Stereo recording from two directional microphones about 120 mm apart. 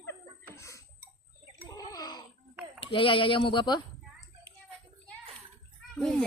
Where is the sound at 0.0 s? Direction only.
20° left (ahead or behind).